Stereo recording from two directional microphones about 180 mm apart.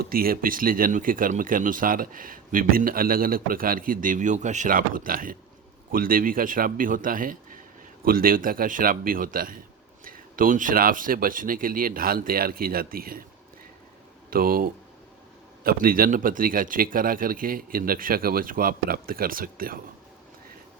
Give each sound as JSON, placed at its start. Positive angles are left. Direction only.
{"t": 0.0, "sound": "speech", "side_deg": -55}
{"t": 14.3, "sound": "speech", "side_deg": -55}